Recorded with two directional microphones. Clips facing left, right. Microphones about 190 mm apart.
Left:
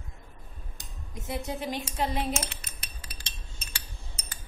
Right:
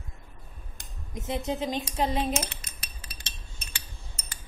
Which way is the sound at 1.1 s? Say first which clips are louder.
Right 4 dB; 20° right (ahead or behind).